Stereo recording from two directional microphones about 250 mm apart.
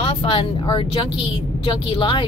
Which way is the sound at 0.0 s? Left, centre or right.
Left.